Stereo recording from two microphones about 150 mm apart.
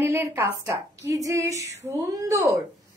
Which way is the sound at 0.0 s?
15° right (ahead or behind).